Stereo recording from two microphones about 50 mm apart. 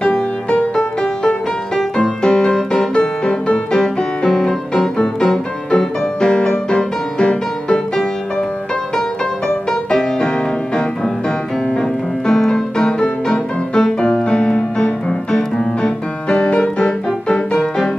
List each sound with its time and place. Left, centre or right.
0.0 s music: left
9.7 s music: centre